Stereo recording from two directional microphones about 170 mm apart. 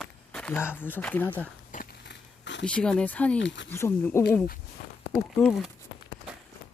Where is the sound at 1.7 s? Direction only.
65° left (ahead or behind); by 2.7 s 90° left.